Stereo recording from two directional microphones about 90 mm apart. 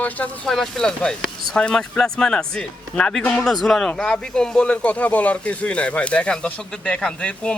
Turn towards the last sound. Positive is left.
turn(degrees=10)  # may be behind; listen again after turning